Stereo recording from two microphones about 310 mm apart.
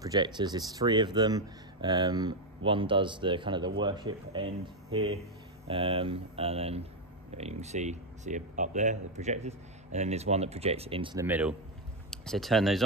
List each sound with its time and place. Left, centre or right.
0.0 s a man's voice: centre